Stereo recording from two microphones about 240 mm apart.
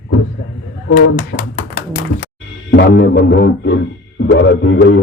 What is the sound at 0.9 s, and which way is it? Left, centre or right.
Speech, left.